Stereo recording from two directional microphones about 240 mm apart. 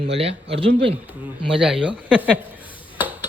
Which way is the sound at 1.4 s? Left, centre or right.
Centre.